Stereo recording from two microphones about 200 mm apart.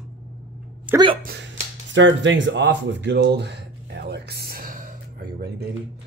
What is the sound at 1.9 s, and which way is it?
Speech, 70° right (ahead or behind).